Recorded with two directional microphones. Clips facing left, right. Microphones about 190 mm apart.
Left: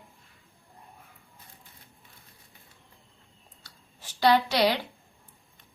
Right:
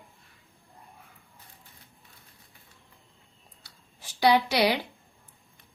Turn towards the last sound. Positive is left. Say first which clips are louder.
# even
turn(degrees=-10)  # may be behind; listen again after turning